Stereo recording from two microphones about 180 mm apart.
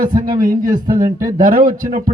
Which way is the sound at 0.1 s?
50° right (ahead or behind).